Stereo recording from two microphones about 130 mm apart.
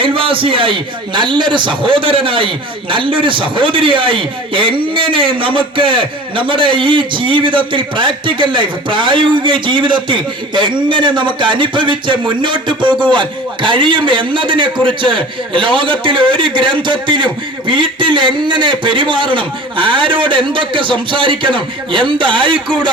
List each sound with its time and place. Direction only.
0.0 s a man's voice: 45° right (ahead or behind)